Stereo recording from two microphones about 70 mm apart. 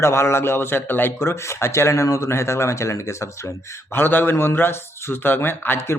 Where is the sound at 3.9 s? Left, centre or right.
Left.